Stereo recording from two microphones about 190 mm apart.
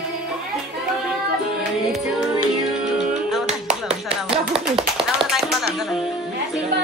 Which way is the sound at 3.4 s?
35° right (ahead or behind).